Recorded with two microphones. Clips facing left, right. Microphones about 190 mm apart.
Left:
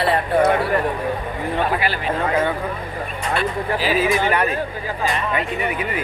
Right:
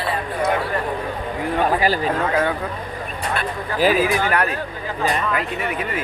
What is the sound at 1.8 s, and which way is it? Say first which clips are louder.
Speech: right 4 dB; 40° right (ahead or behind).